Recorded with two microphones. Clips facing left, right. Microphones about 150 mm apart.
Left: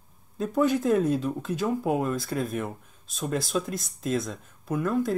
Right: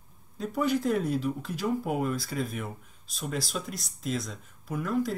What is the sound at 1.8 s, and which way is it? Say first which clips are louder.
Speech: left 3 dB; 50° left (ahead or behind).